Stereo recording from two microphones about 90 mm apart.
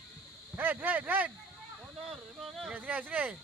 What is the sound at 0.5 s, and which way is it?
Speech, 20° right (ahead or behind).